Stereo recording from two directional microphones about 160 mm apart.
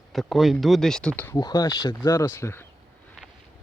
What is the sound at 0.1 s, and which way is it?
Speech, centre (ahead or behind).